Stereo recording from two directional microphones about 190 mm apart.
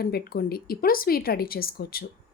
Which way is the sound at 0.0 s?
55° left (ahead or behind).